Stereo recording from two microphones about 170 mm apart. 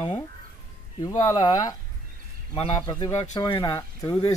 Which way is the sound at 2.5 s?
35° left (ahead or behind).